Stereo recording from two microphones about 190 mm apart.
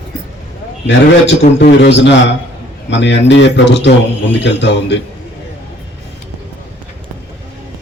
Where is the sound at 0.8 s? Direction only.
65° left (ahead or behind).